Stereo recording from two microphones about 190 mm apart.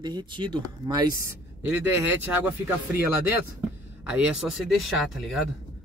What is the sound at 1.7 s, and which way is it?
Speech, 10° right (ahead or behind).